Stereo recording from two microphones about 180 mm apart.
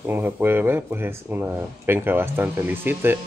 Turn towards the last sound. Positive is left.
turn(degrees=-10)  # may be behind; listen again after turning